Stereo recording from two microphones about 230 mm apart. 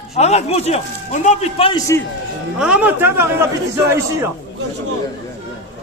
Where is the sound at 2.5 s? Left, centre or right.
Centre.